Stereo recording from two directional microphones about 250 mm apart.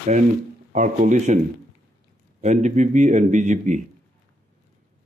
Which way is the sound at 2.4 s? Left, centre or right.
Right.